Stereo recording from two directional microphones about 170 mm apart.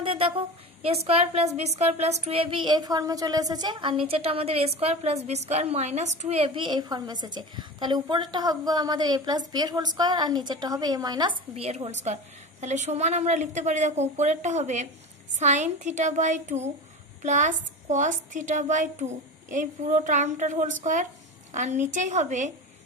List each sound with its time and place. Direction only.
0.0 s a woman's voice: 35° right (ahead or behind)
11.5 s a woman's voice: 35° right (ahead or behind)